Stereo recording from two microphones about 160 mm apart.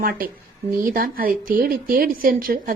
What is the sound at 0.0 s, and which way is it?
A woman's voice, 65° right (ahead or behind).